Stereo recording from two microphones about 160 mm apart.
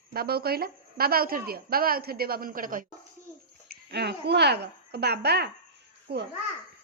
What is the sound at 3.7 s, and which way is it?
A child's voice, 90° right.